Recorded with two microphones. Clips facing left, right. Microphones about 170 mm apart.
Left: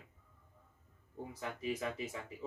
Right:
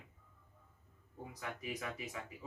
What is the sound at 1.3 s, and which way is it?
Speech, 30° left (ahead or behind).